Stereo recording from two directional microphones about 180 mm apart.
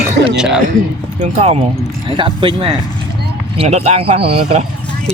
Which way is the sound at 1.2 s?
35° right (ahead or behind).